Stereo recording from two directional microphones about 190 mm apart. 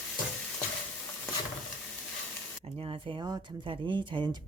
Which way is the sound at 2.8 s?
30° right (ahead or behind).